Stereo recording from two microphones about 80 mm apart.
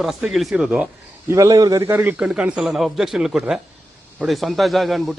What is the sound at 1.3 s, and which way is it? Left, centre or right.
Speech, right.